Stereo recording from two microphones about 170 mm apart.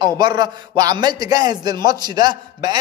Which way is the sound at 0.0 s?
25° right (ahead or behind).